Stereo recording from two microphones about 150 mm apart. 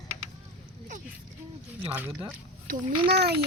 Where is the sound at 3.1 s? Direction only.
90° right.